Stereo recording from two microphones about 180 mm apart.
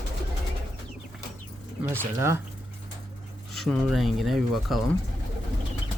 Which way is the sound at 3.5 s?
Centre (ahead or behind).